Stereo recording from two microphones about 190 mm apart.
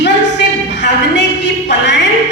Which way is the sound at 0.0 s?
65° left (ahead or behind).